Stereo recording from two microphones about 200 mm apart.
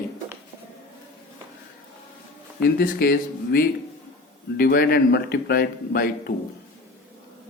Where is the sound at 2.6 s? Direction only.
50° left (ahead or behind).